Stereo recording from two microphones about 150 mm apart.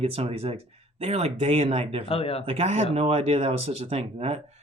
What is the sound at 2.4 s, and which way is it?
Speech, 45° right (ahead or behind).